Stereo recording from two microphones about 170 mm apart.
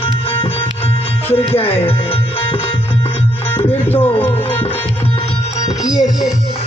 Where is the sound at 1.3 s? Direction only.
35° left (ahead or behind).